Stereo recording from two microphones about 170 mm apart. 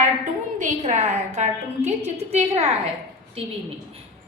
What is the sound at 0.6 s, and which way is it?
A woman's voice, 40° right (ahead or behind).